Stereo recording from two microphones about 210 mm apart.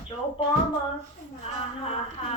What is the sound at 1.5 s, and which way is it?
Speech, 25° left (ahead or behind).